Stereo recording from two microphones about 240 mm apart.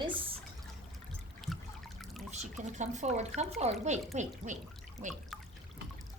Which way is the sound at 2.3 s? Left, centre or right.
Right.